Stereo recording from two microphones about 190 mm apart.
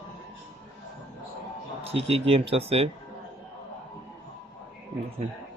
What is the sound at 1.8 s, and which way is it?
Speech, 30° right (ahead or behind).